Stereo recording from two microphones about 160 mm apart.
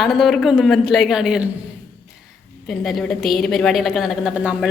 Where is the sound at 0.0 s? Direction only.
Centre (ahead or behind).